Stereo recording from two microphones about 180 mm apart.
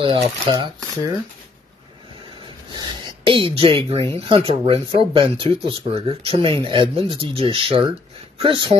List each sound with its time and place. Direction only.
0.1 s speech: 30° right (ahead or behind)
2.7 s speech: 25° right (ahead or behind)